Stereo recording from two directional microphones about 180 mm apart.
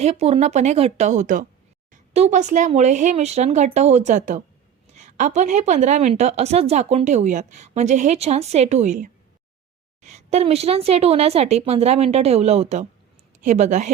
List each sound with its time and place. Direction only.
0.0 s a woman's voice: 35° right (ahead or behind)